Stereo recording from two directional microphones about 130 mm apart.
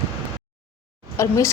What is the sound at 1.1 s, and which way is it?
Speech, 20° left (ahead or behind).